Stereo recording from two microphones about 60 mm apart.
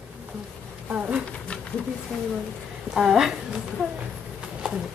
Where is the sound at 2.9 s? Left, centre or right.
Centre.